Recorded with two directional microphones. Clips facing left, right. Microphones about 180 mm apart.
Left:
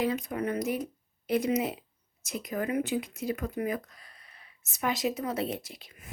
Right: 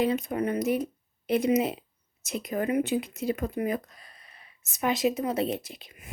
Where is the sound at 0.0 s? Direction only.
25° right (ahead or behind).